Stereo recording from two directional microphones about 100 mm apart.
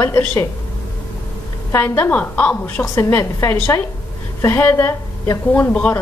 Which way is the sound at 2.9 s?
25° left (ahead or behind).